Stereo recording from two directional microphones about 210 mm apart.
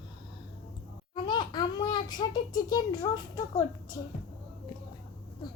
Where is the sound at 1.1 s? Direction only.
20° left (ahead or behind).